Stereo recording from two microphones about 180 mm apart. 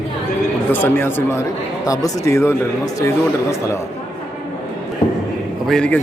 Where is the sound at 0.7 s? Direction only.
10° left (ahead or behind).